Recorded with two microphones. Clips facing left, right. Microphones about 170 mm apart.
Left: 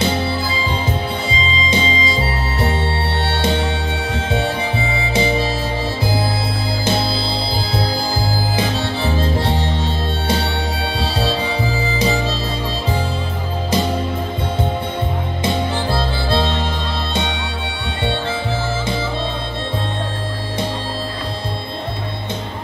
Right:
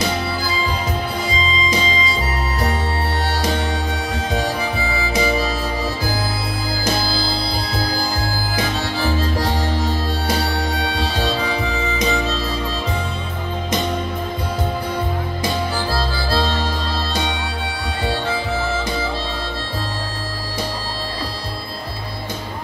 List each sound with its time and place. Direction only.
0.0 s music: 30° left (ahead or behind)
1.3 s music: 25° left (ahead or behind)
3.3 s music: 25° left (ahead or behind)
4.3 s harmonica: 25° left (ahead or behind)
6.8 s music: 30° left (ahead or behind)
8.5 s harmonica: 30° left (ahead or behind)
10.8 s music: 30° left (ahead or behind)
15.4 s harmonica: 25° left (ahead or behind)